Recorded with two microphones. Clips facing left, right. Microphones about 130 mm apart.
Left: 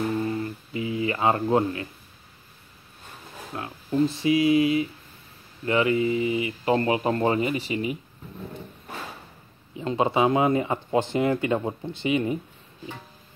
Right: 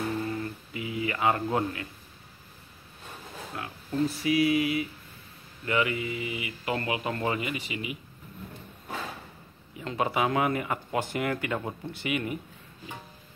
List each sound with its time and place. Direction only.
0.4 s music: 30° left (ahead or behind)
3.5 s speech: 25° left (ahead or behind)
9.8 s speech: 25° left (ahead or behind)